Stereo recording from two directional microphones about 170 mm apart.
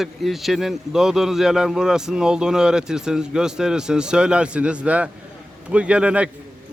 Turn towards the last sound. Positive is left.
turn(degrees=-5)  # may be behind; listen again after turning